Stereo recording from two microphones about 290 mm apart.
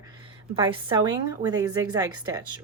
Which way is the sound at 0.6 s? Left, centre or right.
Centre.